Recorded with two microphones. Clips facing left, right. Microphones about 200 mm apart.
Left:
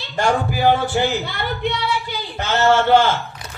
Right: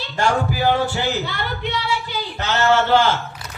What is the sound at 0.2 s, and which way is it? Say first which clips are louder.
Speech: left 2 dB; 50° left (ahead or behind).